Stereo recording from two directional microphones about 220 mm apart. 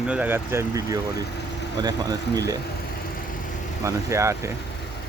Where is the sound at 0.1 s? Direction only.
10° right (ahead or behind).